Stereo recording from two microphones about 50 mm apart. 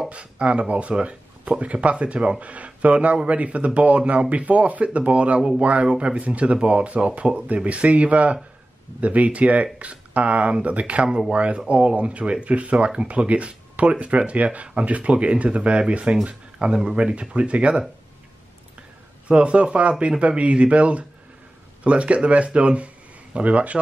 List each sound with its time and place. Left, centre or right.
0.1 s speech: right
11.1 s speech: centre